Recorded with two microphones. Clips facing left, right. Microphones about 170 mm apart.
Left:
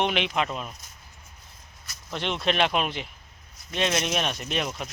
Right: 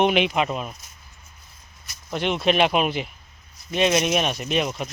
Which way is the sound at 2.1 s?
10° right (ahead or behind).